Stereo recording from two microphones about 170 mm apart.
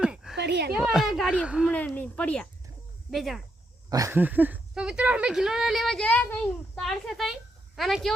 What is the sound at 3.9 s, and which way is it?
A woman's voice, 15° right (ahead or behind).